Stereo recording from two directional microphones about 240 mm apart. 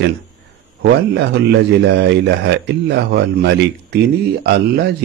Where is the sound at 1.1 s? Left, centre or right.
Right.